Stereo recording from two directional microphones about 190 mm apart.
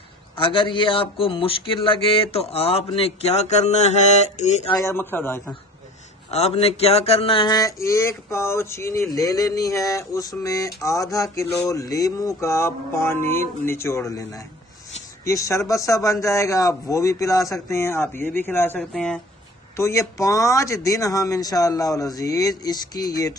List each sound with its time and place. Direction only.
0.4 s speech: 25° left (ahead or behind)
4.7 s speech: 15° left (ahead or behind)
6.3 s speech: 35° left (ahead or behind)